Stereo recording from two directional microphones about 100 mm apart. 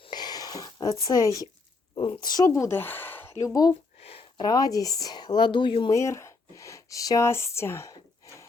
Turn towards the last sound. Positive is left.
turn(degrees=25)  # may be behind; listen again after turning